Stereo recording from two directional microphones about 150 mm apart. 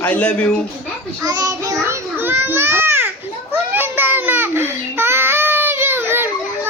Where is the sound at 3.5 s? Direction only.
15° right (ahead or behind).